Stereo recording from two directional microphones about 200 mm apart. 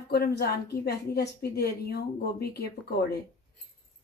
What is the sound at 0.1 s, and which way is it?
A woman's voice, 55° left (ahead or behind).